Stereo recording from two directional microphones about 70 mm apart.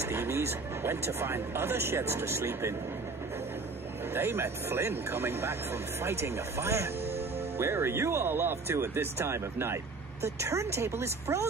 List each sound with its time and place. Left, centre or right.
0.0 s speech: right
4.1 s speech: right